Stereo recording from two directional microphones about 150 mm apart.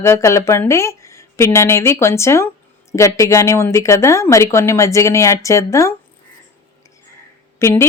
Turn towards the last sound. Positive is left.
turn(degrees=20)  # may be behind; listen again after turning